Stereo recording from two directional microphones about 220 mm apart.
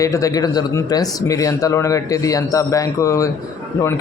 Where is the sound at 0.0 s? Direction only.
15° left (ahead or behind).